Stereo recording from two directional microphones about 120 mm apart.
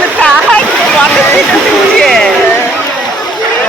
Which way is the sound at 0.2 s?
10° left (ahead or behind).